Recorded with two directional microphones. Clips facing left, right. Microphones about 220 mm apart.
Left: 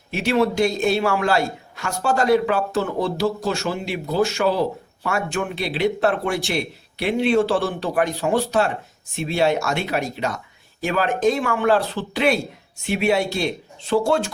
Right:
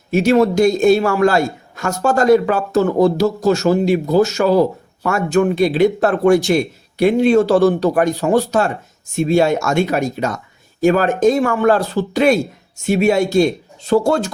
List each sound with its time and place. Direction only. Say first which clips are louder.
0.1 s speech: right 7 dB; 45° right (ahead or behind)